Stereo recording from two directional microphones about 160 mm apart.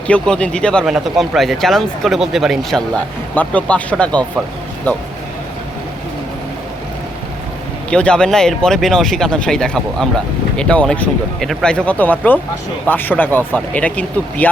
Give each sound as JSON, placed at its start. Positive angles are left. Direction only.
{"t": 0.1, "sound": "speech", "side_deg": 5}
{"t": 7.9, "sound": "speech", "side_deg": 5}